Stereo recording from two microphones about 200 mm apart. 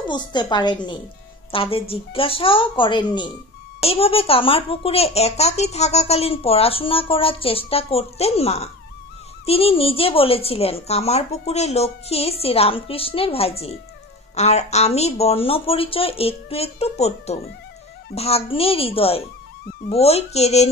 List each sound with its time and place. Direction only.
0.1 s speech: 20° left (ahead or behind)